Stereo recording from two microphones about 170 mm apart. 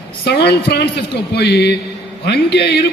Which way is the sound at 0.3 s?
70° left (ahead or behind).